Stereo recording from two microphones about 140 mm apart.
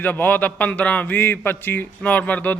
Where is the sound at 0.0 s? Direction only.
10° left (ahead or behind).